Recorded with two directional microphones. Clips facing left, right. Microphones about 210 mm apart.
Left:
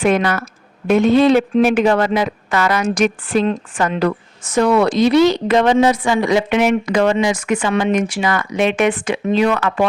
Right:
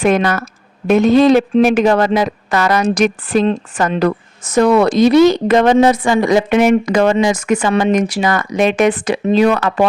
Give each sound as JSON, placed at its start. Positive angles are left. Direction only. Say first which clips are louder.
{"t": 0.0, "sound": "a woman's voice", "louder": "right 2 dB", "side_deg": -45}